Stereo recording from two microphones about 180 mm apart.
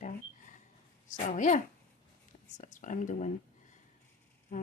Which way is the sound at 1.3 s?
45° left (ahead or behind).